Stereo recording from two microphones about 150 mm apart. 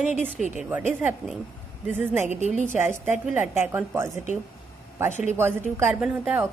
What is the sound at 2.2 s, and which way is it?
Speech, 55° right (ahead or behind).